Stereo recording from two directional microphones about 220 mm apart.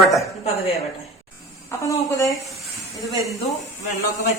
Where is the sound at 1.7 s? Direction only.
15° left (ahead or behind).